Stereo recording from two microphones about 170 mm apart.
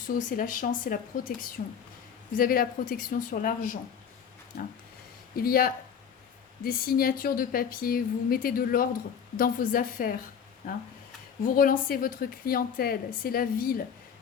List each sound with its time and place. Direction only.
0.2 s a woman's voice: 50° left (ahead or behind)
5.4 s a woman's voice: 60° left (ahead or behind)